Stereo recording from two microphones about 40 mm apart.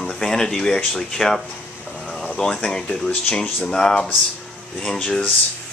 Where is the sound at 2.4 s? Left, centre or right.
Centre.